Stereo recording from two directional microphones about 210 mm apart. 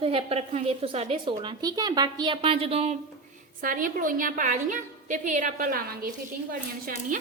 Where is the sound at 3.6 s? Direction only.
40° right (ahead or behind).